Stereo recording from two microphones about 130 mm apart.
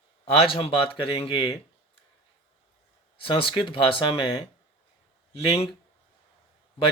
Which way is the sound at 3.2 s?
40° left (ahead or behind).